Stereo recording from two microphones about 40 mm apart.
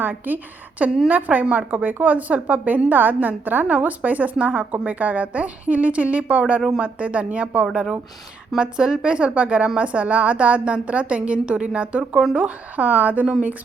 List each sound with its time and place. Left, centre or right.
0.0 s a woman's voice: right
0.8 s a woman's voice: right
8.5 s a woman's voice: right